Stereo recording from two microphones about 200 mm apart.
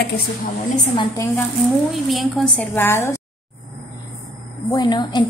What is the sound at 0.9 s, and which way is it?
Speech, 15° left (ahead or behind).